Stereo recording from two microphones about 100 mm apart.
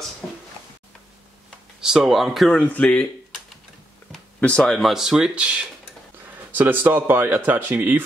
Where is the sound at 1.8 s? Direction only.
5° right (ahead or behind).